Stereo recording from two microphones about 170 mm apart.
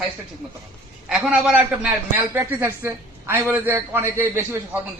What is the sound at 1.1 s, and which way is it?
A man's voice, 5° right (ahead or behind).